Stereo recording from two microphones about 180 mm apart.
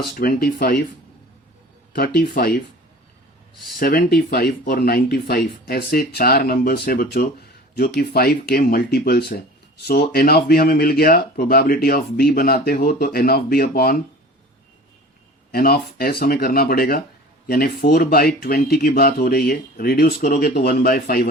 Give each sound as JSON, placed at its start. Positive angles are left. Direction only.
{"t": 0.2, "sound": "speech", "side_deg": 55}
{"t": 2.0, "sound": "speech", "side_deg": 60}
{"t": 3.8, "sound": "speech", "side_deg": 55}
{"t": 15.5, "sound": "speech", "side_deg": 55}